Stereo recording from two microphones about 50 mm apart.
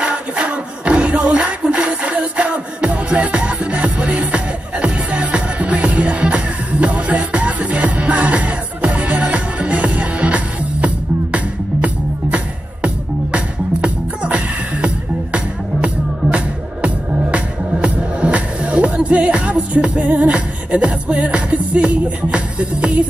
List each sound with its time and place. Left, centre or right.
0.0 s music: right